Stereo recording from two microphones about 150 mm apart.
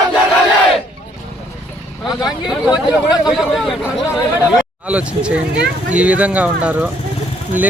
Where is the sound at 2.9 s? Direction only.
5° right (ahead or behind).